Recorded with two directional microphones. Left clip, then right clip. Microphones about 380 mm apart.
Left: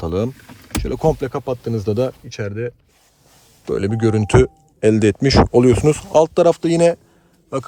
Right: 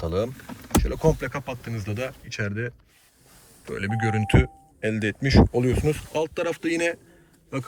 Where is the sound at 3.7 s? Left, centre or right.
Centre.